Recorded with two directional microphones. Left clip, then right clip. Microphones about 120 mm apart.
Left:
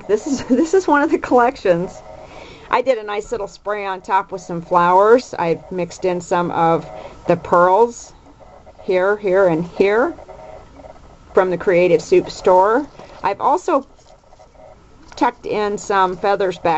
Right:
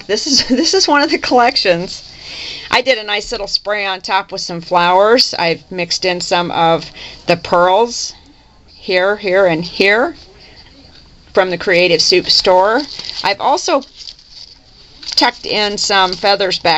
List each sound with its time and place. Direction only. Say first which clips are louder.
0.0 s a woman's voice: right 5 dB; 25° right (ahead or behind)
11.3 s speech: right 3 dB; 25° right (ahead or behind)
15.1 s speech: right 5 dB; 25° right (ahead or behind)